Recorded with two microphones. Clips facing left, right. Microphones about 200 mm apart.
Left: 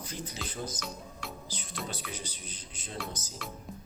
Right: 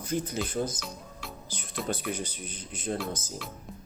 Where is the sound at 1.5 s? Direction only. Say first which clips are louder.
Right 9 dB; 50° right (ahead or behind).